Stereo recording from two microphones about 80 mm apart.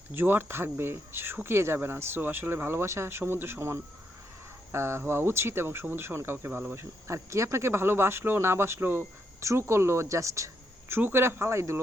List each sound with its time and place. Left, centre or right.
0.1 s speech: right